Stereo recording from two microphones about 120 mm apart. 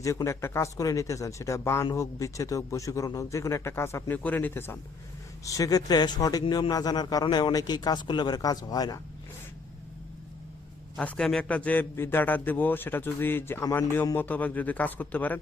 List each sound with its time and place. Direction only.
0.0 s a man's voice: 25° left (ahead or behind)
5.5 s a man's voice: 30° left (ahead or behind)
11.0 s a man's voice: 5° left (ahead or behind)